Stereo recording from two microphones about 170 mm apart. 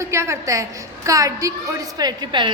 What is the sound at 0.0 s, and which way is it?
A woman's voice, 15° right (ahead or behind).